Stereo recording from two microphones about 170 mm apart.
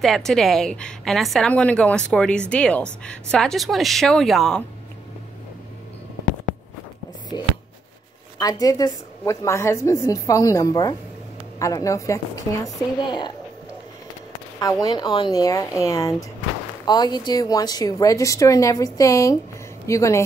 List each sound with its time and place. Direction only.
0.0 s a woman's voice: centre (ahead or behind)
7.3 s a woman's voice: 25° left (ahead or behind)
14.6 s a woman's voice: 20° left (ahead or behind)